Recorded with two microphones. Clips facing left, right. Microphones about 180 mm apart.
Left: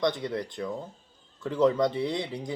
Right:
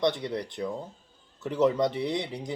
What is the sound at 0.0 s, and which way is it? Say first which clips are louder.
Speech: even; 25° right (ahead or behind).